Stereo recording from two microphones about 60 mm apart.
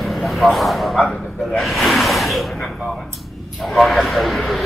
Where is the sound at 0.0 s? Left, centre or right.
Centre.